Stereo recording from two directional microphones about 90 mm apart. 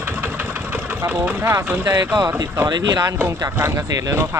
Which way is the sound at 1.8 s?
35° right (ahead or behind).